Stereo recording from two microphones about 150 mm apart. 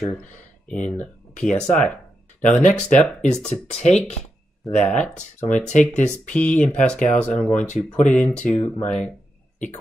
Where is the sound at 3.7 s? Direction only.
45° left (ahead or behind).